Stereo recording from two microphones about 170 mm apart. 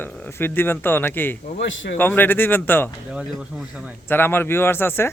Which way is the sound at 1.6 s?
90° left.